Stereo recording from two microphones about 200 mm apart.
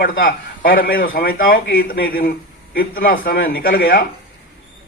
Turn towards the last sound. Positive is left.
turn(degrees=45)  # may be behind; listen again after turning